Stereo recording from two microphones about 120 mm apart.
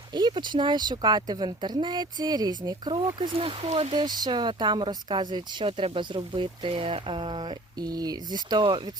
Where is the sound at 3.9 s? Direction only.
35° right (ahead or behind).